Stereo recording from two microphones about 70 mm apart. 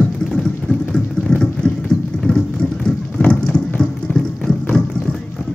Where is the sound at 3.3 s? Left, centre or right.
Centre.